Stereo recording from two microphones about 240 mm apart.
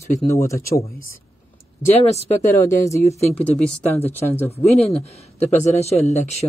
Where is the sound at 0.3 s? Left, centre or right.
Centre.